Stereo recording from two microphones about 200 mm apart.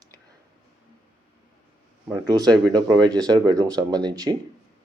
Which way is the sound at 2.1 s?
20° right (ahead or behind).